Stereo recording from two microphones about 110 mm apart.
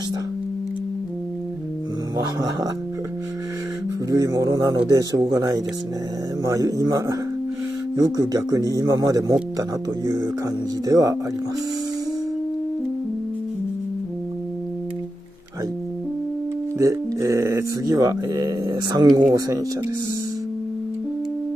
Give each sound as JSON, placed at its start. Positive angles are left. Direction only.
{"t": 2.1, "sound": "speech", "side_deg": -35}
{"t": 4.1, "sound": "speech", "side_deg": -35}
{"t": 16.7, "sound": "speech", "side_deg": -30}